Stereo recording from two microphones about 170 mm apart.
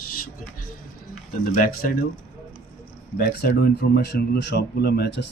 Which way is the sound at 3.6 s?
75° left (ahead or behind).